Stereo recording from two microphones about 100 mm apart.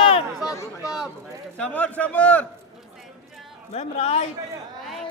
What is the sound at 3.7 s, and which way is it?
Speech, 90° left.